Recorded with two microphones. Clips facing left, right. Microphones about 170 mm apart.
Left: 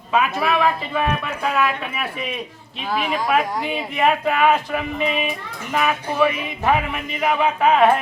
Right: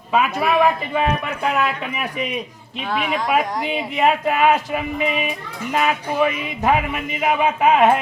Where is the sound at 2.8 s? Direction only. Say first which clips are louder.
Even; centre (ahead or behind).